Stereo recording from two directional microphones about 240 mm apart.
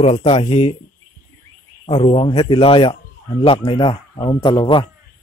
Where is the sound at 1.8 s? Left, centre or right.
Left.